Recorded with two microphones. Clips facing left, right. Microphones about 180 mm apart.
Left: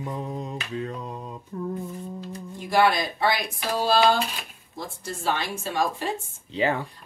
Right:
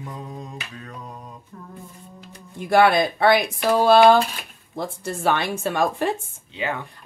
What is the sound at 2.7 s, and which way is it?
Speech, 60° right (ahead or behind).